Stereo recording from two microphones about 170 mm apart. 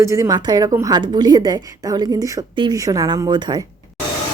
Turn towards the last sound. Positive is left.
turn(degrees=-25)  # may be behind; listen again after turning